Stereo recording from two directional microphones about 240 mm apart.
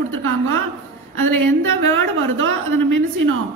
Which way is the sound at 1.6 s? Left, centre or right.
Right.